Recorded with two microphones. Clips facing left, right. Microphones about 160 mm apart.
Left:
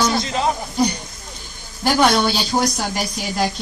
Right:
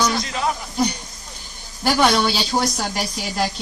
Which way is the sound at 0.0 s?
25° left (ahead or behind).